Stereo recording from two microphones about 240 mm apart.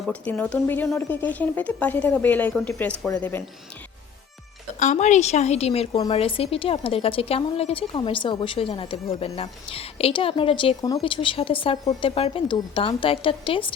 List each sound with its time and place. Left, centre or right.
0.0 s a woman's voice: centre
4.8 s a woman's voice: left